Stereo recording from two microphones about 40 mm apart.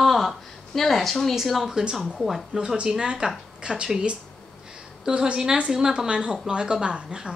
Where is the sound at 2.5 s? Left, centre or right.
Right.